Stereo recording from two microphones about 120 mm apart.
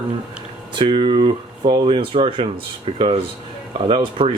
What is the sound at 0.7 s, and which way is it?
Speech, 40° right (ahead or behind).